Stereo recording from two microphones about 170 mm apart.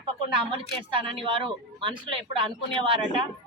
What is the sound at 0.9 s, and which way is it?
Speech, 30° right (ahead or behind).